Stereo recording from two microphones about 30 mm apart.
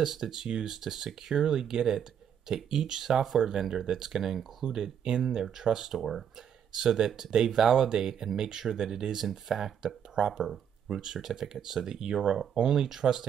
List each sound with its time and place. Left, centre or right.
0.0 s speech: centre
5.9 s speech: centre
6.7 s speech: centre